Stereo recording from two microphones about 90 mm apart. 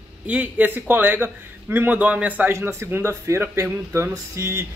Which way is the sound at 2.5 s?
30° right (ahead or behind).